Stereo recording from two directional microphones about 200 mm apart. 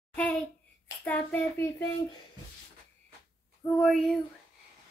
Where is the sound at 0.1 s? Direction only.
5° left (ahead or behind).